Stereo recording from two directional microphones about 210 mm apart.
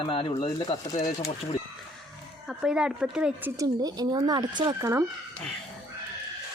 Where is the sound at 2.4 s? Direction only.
Centre (ahead or behind).